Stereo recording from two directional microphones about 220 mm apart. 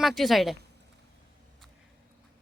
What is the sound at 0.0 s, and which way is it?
Speech, centre (ahead or behind).